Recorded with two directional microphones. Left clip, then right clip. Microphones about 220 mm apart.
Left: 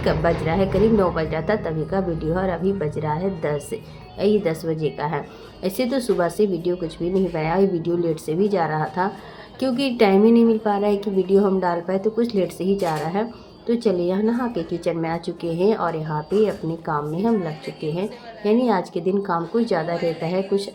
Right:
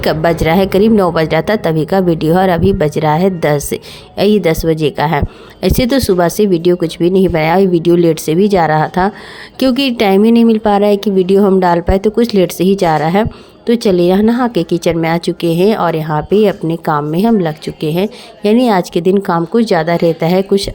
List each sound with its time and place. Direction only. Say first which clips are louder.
0.0 s a woman's voice: right 8 dB; 50° right (ahead or behind)